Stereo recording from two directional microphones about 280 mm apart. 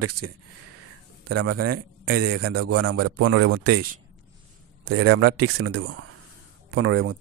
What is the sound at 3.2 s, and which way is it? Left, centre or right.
Speech, right.